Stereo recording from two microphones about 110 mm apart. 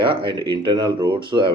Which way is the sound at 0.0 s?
50° right (ahead or behind).